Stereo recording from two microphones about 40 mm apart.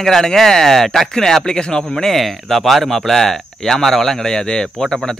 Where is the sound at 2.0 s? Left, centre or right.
Centre.